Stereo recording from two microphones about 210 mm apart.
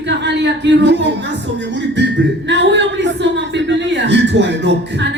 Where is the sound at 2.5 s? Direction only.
55° right (ahead or behind).